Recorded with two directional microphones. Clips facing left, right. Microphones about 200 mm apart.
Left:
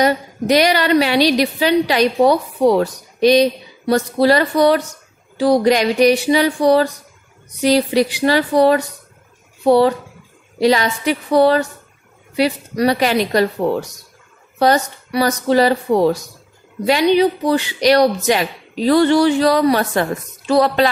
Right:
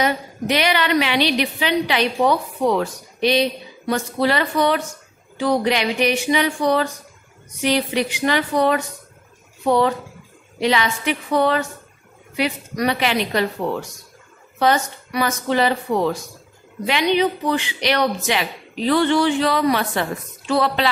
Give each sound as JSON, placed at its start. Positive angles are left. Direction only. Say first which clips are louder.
{"t": 0.0, "sound": "a woman's voice", "louder": "left 5 dB", "side_deg": 40}